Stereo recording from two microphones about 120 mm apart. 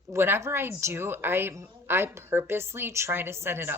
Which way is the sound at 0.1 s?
20° right (ahead or behind).